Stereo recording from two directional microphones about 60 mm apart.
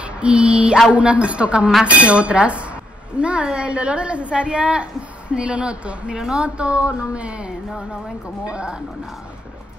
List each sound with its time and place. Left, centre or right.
0.0 s music: centre
0.9 s speech: right